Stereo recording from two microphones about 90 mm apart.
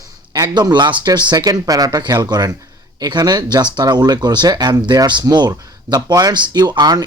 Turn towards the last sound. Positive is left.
turn(degrees=-50)  # may be behind; listen again after turning